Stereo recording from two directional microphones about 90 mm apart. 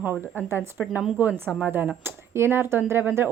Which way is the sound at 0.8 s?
10° right (ahead or behind).